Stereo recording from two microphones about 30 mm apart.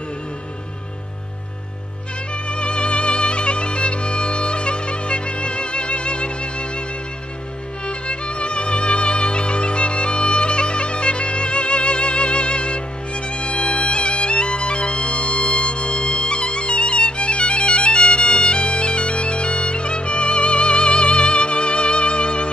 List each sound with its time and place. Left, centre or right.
2.5 s music: left
7.8 s music: left